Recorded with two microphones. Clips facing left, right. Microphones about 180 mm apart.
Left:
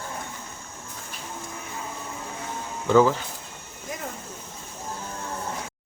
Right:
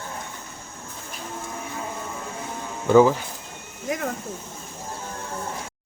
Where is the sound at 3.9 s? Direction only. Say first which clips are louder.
Right 8 dB; 75° right (ahead or behind).